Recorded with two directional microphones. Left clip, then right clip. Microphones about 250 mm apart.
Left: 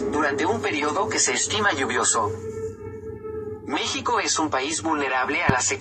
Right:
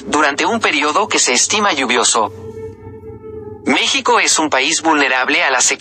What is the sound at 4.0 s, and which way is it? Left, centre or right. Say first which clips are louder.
Speech: right 10 dB; right.